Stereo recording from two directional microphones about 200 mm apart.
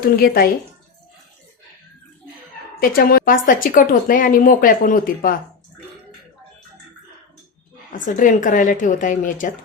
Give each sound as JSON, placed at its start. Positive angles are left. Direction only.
{"t": 0.0, "sound": "a woman's voice", "side_deg": 50}
{"t": 2.9, "sound": "a woman's voice", "side_deg": 45}
{"t": 8.0, "sound": "a woman's voice", "side_deg": 40}